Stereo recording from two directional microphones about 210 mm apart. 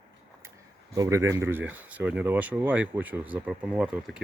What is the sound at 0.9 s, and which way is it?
Speech, 15° right (ahead or behind).